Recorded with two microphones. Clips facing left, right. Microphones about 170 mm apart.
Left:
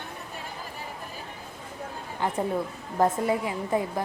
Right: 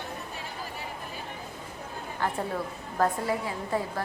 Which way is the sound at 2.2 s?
15° left (ahead or behind).